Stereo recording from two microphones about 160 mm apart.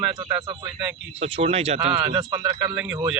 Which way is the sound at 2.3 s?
25° right (ahead or behind).